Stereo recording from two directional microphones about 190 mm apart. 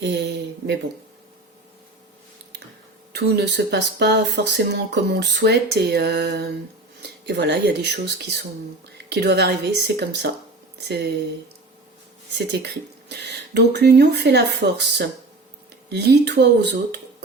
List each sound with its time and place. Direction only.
0.0 s a sound: 65° right (ahead or behind)
3.1 s speech: 60° right (ahead or behind)
12.3 s speech: 65° right (ahead or behind)